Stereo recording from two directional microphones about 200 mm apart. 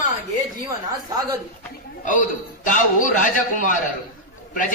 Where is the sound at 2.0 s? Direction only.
40° left (ahead or behind).